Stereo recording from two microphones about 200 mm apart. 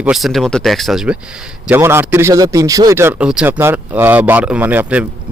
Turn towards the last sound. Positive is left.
turn(degrees=-10)  # may be behind; listen again after turning